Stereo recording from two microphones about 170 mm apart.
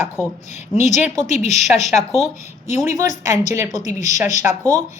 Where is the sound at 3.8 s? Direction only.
45° left (ahead or behind).